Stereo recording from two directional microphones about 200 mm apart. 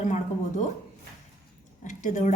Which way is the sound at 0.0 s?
35° left (ahead or behind).